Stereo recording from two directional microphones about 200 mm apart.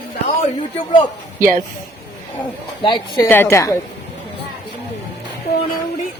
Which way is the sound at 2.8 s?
25° left (ahead or behind).